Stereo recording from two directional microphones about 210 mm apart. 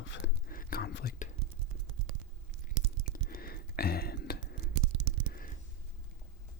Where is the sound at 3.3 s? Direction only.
45° left (ahead or behind).